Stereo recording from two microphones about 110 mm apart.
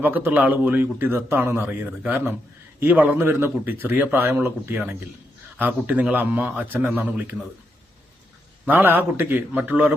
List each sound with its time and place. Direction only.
0.0 s a man's voice: 15° right (ahead or behind)
8.6 s a man's voice: 20° right (ahead or behind)